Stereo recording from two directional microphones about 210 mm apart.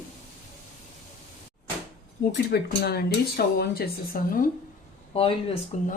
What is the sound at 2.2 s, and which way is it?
A woman's voice, 50° left (ahead or behind).